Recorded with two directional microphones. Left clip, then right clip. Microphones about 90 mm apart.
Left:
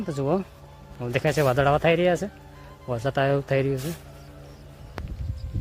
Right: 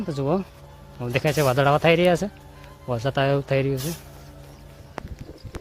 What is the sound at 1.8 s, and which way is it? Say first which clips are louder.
Speech: right 3 dB; 30° right (ahead or behind).